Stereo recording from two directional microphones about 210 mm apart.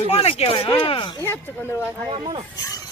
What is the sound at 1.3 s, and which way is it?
Speech, 10° left (ahead or behind).